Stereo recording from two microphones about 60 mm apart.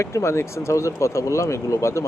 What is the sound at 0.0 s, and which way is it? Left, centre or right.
Speech, left.